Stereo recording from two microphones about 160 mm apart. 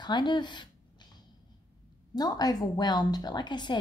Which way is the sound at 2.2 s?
25° left (ahead or behind).